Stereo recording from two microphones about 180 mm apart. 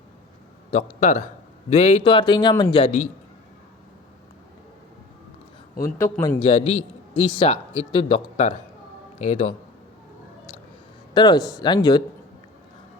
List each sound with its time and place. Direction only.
0.9 s speech: 40° left (ahead or behind)
5.8 s a man's voice: 15° left (ahead or behind)
6.4 s speech: 35° left (ahead or behind)
11.1 s speech: 25° left (ahead or behind)